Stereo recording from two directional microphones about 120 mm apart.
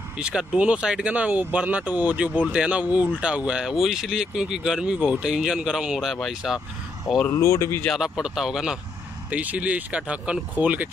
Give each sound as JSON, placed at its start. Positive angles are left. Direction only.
{"t": 0.2, "sound": "speech", "side_deg": -5}
{"t": 7.2, "sound": "speech", "side_deg": 25}
{"t": 7.8, "sound": "speech", "side_deg": 0}